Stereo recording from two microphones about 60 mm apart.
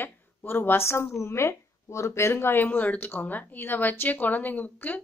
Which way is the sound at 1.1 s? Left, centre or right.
Left.